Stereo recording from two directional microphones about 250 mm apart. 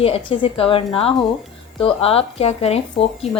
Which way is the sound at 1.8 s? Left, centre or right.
Left.